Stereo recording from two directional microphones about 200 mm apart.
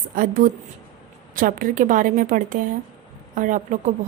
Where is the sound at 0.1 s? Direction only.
45° right (ahead or behind).